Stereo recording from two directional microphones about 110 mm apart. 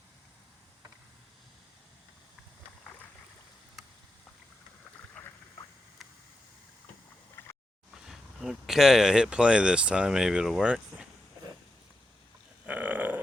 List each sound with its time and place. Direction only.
5.2 s rowboat: 10° left (ahead or behind)
7.4 s a sound: 20° left (ahead or behind)
8.0 s speech: 5° right (ahead or behind)
12.6 s burping: 15° right (ahead or behind)